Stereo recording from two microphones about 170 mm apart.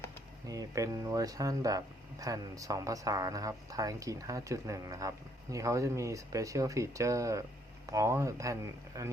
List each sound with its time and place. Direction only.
0.4 s speech: 20° right (ahead or behind)